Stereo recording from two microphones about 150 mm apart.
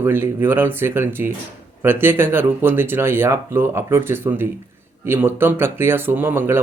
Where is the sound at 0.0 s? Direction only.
15° right (ahead or behind).